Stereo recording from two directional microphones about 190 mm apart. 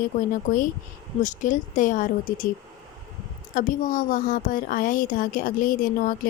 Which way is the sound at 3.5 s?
45° left (ahead or behind).